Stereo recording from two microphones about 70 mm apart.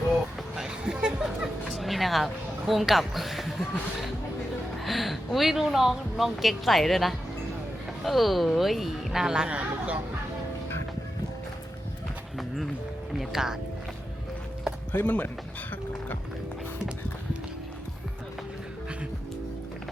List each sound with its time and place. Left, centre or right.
0.5 s music: centre
1.7 s speech: centre
13.1 s music: centre
14.9 s speech: left